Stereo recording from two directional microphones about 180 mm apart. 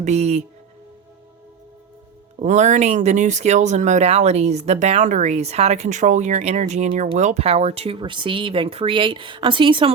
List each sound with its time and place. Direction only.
0.0 s speech: 40° right (ahead or behind)
2.4 s speech: 40° right (ahead or behind)